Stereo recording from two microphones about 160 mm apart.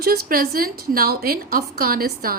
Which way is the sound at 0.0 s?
65° right (ahead or behind).